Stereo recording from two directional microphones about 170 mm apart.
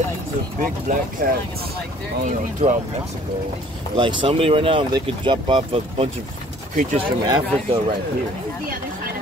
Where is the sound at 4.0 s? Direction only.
30° right (ahead or behind).